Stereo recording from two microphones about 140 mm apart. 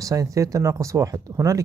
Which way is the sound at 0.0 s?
25° right (ahead or behind).